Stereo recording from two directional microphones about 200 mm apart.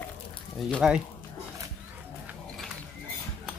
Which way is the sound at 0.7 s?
Centre (ahead or behind).